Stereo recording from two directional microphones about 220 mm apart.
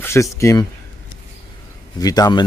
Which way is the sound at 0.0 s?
10° left (ahead or behind).